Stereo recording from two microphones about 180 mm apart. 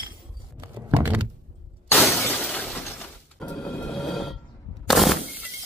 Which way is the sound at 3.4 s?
5° left (ahead or behind).